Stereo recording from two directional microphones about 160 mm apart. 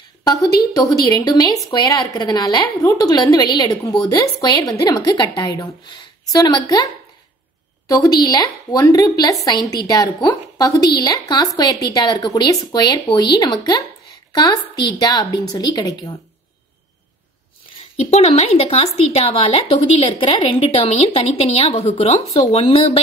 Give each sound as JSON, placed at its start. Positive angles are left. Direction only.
{"t": 0.2, "sound": "a woman's voice", "side_deg": 25}
{"t": 7.9, "sound": "a woman's voice", "side_deg": 25}
{"t": 17.9, "sound": "speech", "side_deg": 40}